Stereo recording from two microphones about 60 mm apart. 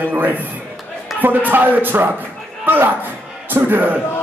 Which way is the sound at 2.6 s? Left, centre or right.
Right.